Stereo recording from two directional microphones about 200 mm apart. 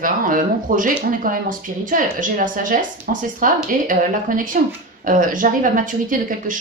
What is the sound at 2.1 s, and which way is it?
Speech, 40° right (ahead or behind).